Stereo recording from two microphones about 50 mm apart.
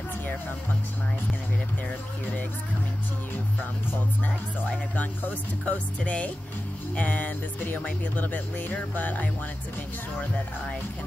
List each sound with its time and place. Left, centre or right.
5.7 s speech: left